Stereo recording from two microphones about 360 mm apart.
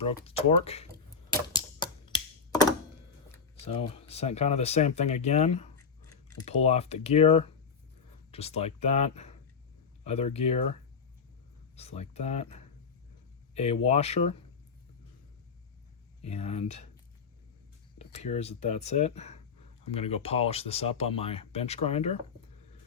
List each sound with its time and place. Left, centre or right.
0.0 s speech: centre
1.5 s a sound: centre
3.3 s speech: centre
11.8 s speech: centre
16.2 s speech: centre
17.9 s speech: centre